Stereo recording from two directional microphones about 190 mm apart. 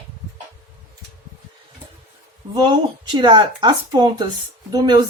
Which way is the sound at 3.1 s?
25° right (ahead or behind).